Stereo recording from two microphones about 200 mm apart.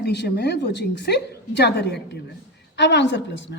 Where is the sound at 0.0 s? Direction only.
55° left (ahead or behind).